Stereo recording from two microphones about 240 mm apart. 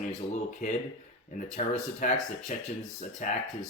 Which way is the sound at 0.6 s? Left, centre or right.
Left.